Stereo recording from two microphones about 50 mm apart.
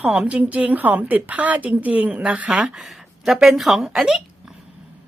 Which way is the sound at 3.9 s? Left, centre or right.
Centre.